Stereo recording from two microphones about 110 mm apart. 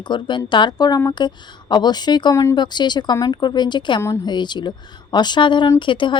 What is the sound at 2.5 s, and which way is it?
Speech, 40° left (ahead or behind).